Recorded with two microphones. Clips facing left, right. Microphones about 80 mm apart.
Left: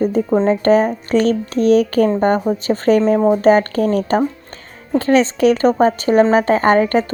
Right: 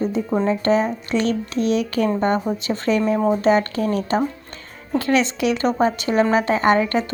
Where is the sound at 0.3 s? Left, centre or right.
Left.